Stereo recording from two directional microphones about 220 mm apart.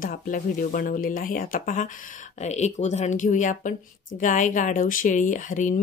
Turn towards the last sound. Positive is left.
turn(degrees=35)  # may be behind; listen again after turning